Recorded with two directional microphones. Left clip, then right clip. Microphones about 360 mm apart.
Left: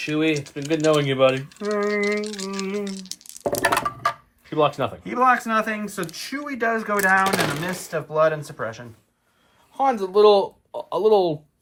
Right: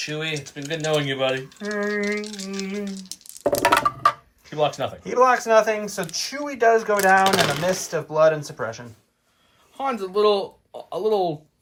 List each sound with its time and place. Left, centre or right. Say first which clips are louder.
0.0 s rattle: left 5 dB; centre
3.1 s a sound: right 5 dB; centre
4.4 s speech: left 2 dB; centre
5.0 s speech: right 2 dB; centre
9.7 s speech: left 5 dB; centre